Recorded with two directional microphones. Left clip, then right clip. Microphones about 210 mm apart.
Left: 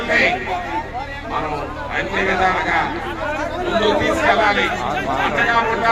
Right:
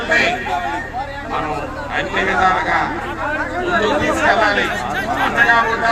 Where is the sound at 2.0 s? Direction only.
35° right (ahead or behind).